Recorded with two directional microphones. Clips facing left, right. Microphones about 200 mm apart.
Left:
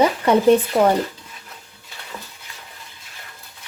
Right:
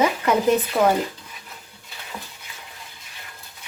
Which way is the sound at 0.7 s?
25° left (ahead or behind).